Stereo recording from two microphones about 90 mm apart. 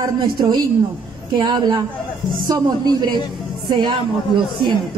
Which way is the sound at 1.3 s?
55° right (ahead or behind).